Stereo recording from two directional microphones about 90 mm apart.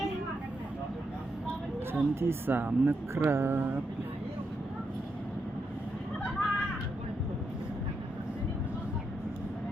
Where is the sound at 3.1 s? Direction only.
30° right (ahead or behind).